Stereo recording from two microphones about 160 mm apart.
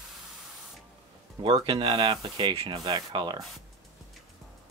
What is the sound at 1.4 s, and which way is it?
Speech, 35° right (ahead or behind).